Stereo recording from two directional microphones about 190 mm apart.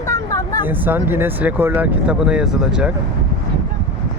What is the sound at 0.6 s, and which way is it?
Speech, 10° right (ahead or behind).